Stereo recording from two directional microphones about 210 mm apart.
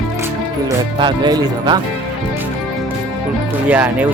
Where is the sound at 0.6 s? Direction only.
20° right (ahead or behind).